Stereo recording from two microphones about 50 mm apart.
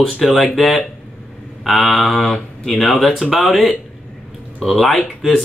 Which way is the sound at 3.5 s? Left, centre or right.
Centre.